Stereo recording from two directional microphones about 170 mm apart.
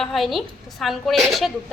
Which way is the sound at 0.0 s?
Centre (ahead or behind).